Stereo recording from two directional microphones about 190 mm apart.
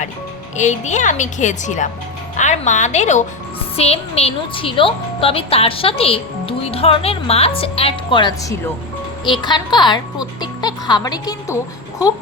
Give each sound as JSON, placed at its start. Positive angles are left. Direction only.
{"t": 0.5, "sound": "a woman's voice", "side_deg": 40}